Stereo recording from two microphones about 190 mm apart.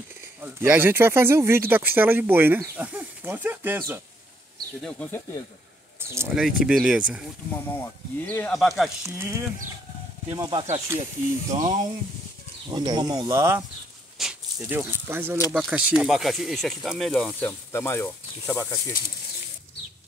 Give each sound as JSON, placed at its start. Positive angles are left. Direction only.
{"t": 0.4, "sound": "speech", "side_deg": -10}
{"t": 4.8, "sound": "speech", "side_deg": 10}
{"t": 5.9, "sound": "speech", "side_deg": -15}
{"t": 7.6, "sound": "speech", "side_deg": 10}
{"t": 9.0, "sound": "speech", "side_deg": -15}
{"t": 11.5, "sound": "speech", "side_deg": -35}
{"t": 12.6, "sound": "speech", "side_deg": -25}
{"t": 14.1, "sound": "speech", "side_deg": -5}